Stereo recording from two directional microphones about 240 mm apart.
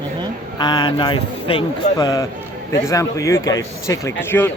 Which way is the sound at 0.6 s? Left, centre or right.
Centre.